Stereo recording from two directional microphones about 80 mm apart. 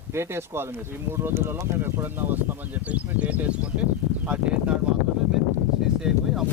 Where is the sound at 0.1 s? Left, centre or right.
Right; by 3.7 s centre.